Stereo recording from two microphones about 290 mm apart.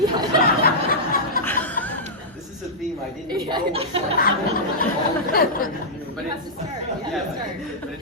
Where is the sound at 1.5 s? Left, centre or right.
Centre.